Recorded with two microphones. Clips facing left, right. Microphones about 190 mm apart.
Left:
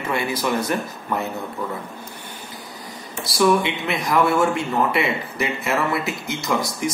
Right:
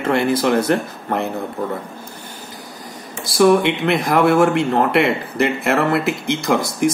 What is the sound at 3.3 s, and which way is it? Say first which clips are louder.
Speech: right 5 dB; 60° right (ahead or behind).